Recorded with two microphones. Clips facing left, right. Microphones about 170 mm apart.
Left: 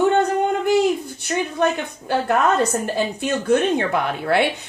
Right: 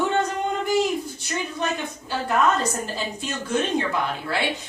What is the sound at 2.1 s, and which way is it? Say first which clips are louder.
Speech: left 8 dB; 60° left (ahead or behind).